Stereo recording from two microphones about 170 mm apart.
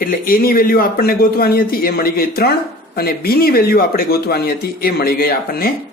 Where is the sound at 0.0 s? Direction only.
60° left (ahead or behind).